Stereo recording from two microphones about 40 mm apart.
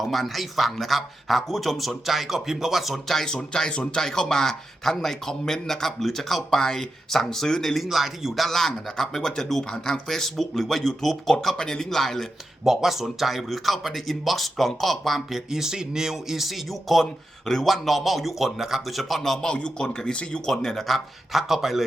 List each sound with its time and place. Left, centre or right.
0.0 s a man's voice: centre
3.2 s speech: centre
7.8 s speech: centre
12.6 s a man's voice: centre
15.4 s speech: centre
16.4 s a man's voice: centre
21.5 s speech: centre